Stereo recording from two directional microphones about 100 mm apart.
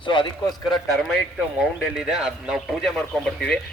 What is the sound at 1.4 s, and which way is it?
A man's voice, 5° right (ahead or behind).